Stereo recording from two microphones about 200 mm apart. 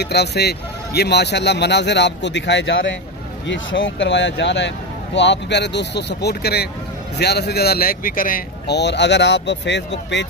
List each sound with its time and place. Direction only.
0.0 s speech: 55° left (ahead or behind)